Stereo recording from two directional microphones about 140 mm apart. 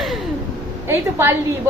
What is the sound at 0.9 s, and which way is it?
Speech, 15° right (ahead or behind).